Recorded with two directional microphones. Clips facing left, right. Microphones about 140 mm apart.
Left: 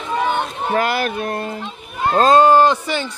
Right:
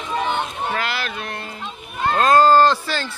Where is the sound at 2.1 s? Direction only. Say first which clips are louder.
Left 2 dB; 25° left (ahead or behind).